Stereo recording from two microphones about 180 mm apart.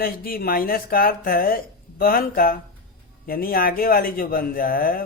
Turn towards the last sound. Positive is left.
turn(degrees=55)  # may be behind; listen again after turning